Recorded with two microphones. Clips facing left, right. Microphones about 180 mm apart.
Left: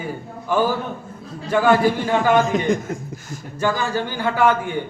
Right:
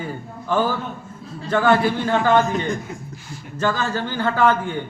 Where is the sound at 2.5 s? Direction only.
90° left.